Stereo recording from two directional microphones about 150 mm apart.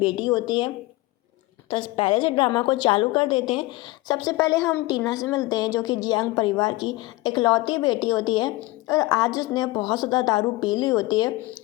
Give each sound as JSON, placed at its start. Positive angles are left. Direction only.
{"t": 0.0, "sound": "a woman's voice", "side_deg": 25}
{"t": 1.7, "sound": "a woman's voice", "side_deg": 35}